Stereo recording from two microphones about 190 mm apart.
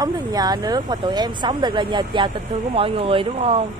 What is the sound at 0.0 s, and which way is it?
Speech, 20° right (ahead or behind).